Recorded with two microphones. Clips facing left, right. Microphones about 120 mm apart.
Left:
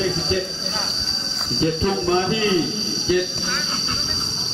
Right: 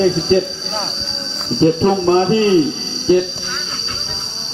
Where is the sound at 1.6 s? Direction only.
40° right (ahead or behind).